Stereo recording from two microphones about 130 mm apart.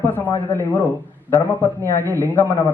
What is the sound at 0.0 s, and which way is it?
A man's voice, 15° left (ahead or behind).